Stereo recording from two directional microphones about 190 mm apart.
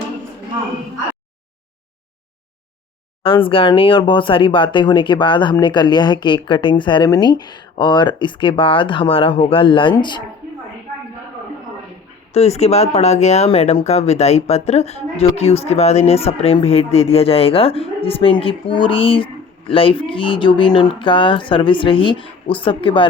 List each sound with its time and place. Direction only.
3.2 s speech: 25° left (ahead or behind)
12.3 s speech: 35° left (ahead or behind)